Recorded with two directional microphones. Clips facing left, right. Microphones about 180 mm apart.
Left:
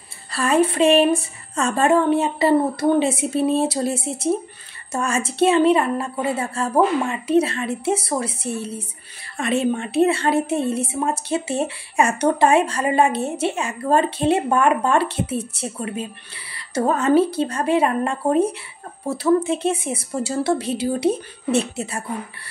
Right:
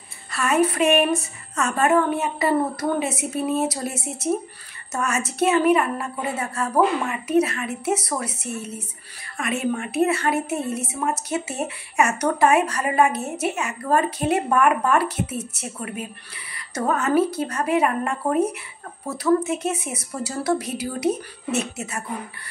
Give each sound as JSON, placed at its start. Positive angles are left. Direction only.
{"t": 0.3, "sound": "a woman's voice", "side_deg": 30}